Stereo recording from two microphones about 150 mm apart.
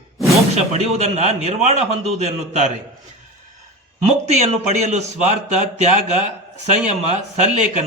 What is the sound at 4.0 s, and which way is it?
Speech, 50° right (ahead or behind).